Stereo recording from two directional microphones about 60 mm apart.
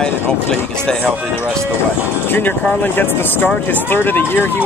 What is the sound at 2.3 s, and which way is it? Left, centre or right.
Speech, left.